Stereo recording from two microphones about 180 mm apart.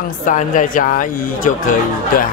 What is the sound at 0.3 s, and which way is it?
Speech, 45° left (ahead or behind).